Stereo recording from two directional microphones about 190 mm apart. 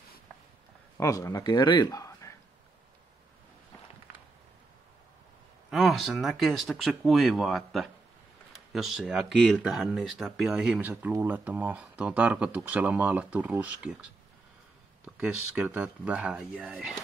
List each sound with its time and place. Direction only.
0.9 s speech: 15° left (ahead or behind)
5.7 s speech: centre (ahead or behind)
15.1 s speech: 5° right (ahead or behind)